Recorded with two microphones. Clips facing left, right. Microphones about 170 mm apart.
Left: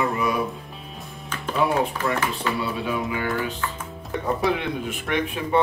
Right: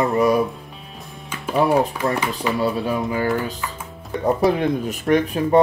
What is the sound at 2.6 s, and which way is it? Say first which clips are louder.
Speech: right 5 dB; 40° right (ahead or behind).